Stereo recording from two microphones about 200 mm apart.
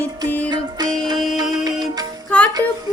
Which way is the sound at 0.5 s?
20° right (ahead or behind).